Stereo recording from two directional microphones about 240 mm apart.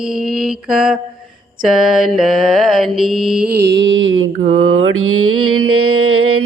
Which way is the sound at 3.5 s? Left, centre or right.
Right.